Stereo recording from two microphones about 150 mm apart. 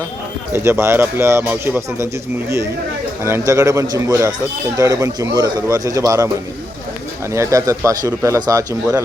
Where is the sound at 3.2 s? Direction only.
20° right (ahead or behind).